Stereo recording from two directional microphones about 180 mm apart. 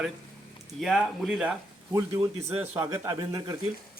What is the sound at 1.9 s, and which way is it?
A man's voice, 20° right (ahead or behind).